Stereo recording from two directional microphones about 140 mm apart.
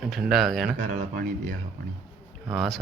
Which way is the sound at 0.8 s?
70° right (ahead or behind).